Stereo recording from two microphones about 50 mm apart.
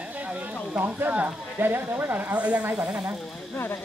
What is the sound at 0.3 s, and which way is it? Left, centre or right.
Speech, right.